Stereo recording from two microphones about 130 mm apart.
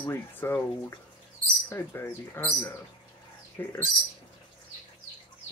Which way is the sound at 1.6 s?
20° left (ahead or behind).